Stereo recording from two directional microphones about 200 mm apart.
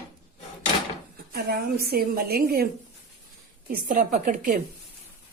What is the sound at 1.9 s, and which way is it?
A woman's voice, 50° right (ahead or behind).